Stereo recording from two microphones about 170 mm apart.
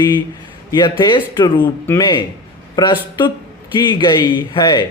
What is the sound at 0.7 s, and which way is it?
Speech, 25° left (ahead or behind).